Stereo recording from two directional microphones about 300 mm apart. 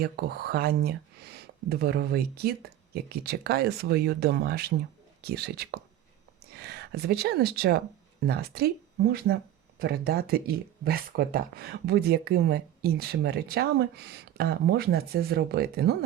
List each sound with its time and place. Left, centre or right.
0.0 s speech: right